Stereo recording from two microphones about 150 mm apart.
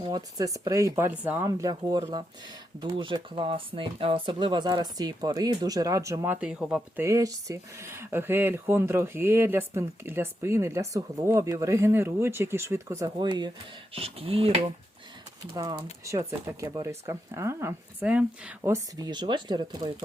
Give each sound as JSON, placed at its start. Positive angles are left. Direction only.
{"t": 0.0, "sound": "speech", "side_deg": -25}
{"t": 1.5, "sound": "speech", "side_deg": -25}
{"t": 7.0, "sound": "speech", "side_deg": -20}
{"t": 13.9, "sound": "speech", "side_deg": -40}
{"t": 15.4, "sound": "speech", "side_deg": -30}
{"t": 18.7, "sound": "speech", "side_deg": -25}